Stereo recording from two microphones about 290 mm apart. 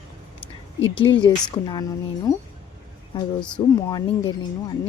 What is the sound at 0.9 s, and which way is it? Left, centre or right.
Speech, centre.